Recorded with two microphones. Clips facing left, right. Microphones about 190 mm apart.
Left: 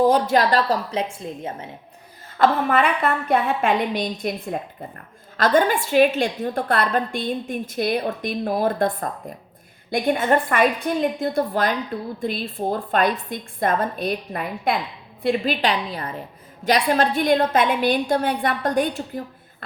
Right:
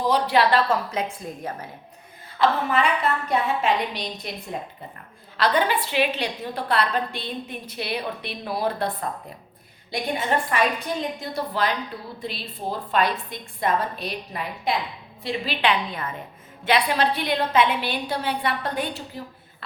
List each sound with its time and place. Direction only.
0.0 s a woman's voice: 45° left (ahead or behind); by 1.6 s 25° left (ahead or behind)
2.4 s a woman's voice: 55° left (ahead or behind)
5.4 s a woman's voice: 45° left (ahead or behind)